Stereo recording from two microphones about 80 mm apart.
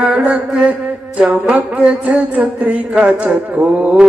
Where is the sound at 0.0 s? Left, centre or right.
Centre.